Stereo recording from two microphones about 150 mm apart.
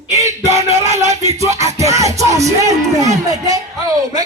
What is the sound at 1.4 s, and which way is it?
Music, 20° right (ahead or behind).